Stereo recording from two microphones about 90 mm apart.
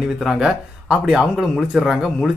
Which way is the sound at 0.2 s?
5° right (ahead or behind).